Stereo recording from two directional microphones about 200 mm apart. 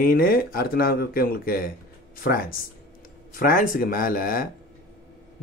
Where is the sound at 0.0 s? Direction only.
45° left (ahead or behind).